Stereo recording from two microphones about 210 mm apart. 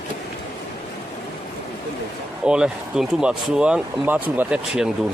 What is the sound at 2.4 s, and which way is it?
Speech, 5° right (ahead or behind).